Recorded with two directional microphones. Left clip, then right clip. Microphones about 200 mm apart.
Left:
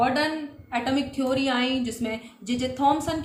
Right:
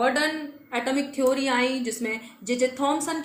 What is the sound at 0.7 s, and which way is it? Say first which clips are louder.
A woman's voice: even; 15° left (ahead or behind).